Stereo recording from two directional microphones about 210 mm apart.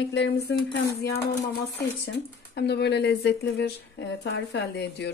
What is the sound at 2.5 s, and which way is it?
Speech, 55° left (ahead or behind).